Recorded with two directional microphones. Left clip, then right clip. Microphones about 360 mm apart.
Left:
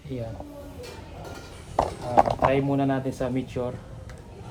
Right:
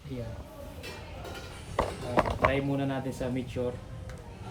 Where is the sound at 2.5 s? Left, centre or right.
Centre.